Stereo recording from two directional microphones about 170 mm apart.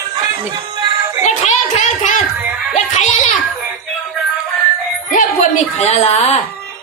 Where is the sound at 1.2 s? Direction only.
45° left (ahead or behind).